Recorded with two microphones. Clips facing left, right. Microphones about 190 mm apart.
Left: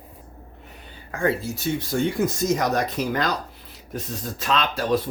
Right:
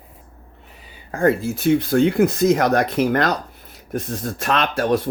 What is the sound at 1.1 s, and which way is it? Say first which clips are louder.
Speech: right 6 dB; 45° right (ahead or behind).